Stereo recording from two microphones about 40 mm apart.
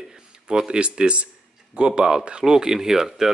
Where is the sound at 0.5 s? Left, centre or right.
Right.